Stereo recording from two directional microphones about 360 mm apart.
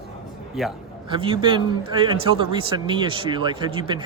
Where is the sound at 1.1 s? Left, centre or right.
Centre.